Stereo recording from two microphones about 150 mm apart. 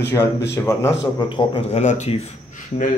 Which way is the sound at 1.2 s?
30° left (ahead or behind).